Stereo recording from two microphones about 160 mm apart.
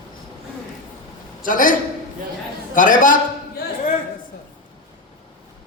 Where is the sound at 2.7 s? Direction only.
55° left (ahead or behind).